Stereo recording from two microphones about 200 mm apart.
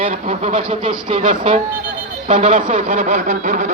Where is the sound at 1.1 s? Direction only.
35° right (ahead or behind).